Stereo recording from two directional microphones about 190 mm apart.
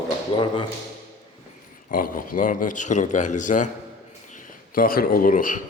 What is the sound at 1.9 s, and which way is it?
A man's voice, 45° left (ahead or behind).